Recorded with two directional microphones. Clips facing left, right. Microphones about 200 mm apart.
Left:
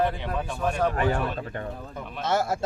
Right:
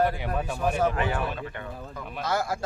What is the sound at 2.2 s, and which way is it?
Speech, 25° left (ahead or behind).